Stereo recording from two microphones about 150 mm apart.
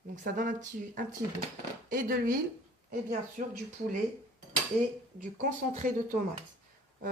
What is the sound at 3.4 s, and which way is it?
Speech, 55° right (ahead or behind).